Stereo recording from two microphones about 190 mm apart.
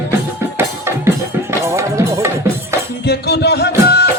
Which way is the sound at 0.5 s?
15° right (ahead or behind).